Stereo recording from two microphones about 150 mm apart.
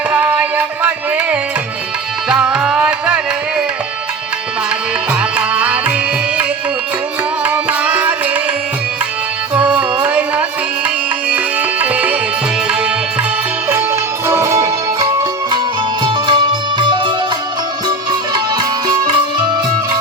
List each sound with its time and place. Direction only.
0.1 s music: 10° right (ahead or behind)
2.3 s music: 5° right (ahead or behind)
5.4 s music: 10° right (ahead or behind)
7.4 s music: 10° right (ahead or behind)
9.6 s music: 10° right (ahead or behind)
14.3 s music: 20° right (ahead or behind)